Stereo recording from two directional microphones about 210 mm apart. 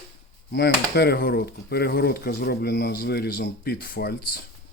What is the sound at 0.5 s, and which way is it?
Speech, 50° left (ahead or behind).